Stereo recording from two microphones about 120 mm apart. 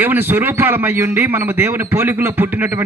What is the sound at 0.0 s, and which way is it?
A man's voice, 15° right (ahead or behind).